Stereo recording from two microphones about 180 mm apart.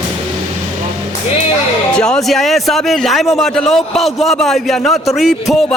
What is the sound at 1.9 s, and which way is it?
A man's voice, 5° left (ahead or behind).